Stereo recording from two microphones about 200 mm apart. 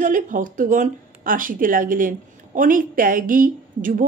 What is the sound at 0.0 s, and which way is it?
Speech, 40° right (ahead or behind).